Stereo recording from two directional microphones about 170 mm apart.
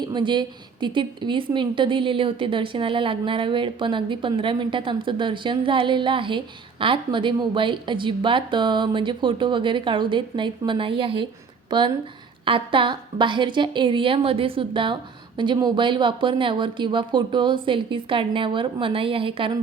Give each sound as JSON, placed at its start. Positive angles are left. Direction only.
{"t": 0.1, "sound": "speech", "side_deg": -30}